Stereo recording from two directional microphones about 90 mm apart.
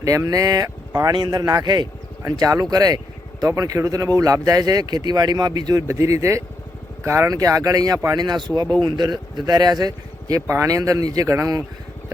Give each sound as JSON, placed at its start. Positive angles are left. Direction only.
{"t": 0.0, "sound": "speech", "side_deg": -40}